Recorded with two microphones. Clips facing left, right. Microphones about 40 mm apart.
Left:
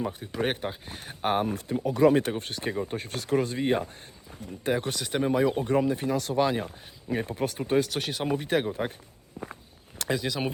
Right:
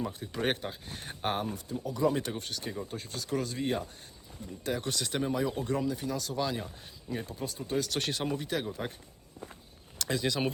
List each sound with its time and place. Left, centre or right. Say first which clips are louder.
0.0 s speech: left 3 dB; centre
0.9 s speech: left 2 dB; centre
1.5 s speech: left 7 dB; left
2.1 s speech: left 8 dB; left
3.3 s speech: left 7 dB; left
4.9 s speech: left 3 dB; centre
5.2 s speech: left 8 dB; left
7.3 s speech: left 9 dB; left
7.9 s speech: left 2 dB; centre
8.3 s speech: left 7 dB; left
10.2 s speech: right 3 dB; centre